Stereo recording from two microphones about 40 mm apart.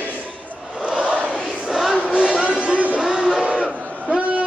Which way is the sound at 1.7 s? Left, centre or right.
Centre.